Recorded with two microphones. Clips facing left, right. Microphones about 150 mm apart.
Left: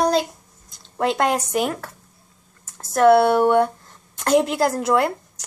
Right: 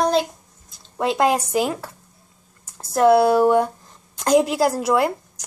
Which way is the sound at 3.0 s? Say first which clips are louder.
Even; 10° right (ahead or behind).